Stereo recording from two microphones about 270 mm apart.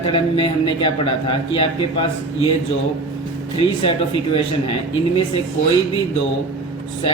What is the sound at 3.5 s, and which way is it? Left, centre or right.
Speech, centre.